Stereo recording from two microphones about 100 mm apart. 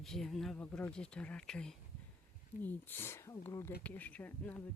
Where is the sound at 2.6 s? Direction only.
20° left (ahead or behind).